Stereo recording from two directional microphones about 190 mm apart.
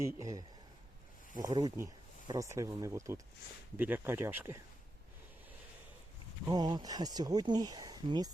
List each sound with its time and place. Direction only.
0.2 s speech: 15° right (ahead or behind)
6.4 s speech: 20° right (ahead or behind)